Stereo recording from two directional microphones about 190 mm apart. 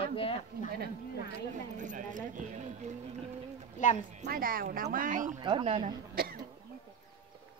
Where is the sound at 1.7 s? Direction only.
40° right (ahead or behind).